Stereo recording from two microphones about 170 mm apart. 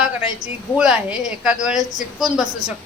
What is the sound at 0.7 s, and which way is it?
A woman's voice, 5° right (ahead or behind).